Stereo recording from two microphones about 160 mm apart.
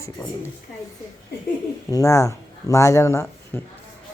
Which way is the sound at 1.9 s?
20° left (ahead or behind).